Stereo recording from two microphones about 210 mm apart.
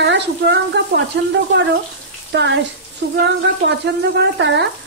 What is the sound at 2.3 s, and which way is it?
Speech, 55° right (ahead or behind).